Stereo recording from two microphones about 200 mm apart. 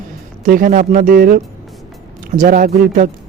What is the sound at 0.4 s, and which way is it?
Speech, 45° right (ahead or behind).